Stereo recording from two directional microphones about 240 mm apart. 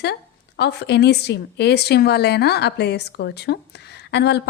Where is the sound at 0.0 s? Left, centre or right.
Left.